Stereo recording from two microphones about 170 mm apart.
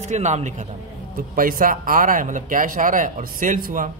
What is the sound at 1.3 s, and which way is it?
A man's voice, 55° right (ahead or behind).